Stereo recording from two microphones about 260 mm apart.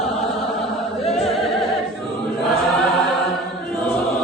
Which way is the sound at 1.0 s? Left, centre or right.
Centre.